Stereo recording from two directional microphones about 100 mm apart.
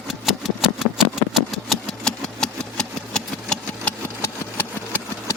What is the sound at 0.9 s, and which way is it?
Engine, centre (ahead or behind).